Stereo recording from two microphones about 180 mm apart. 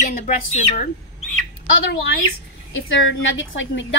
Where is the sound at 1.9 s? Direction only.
65° left (ahead or behind).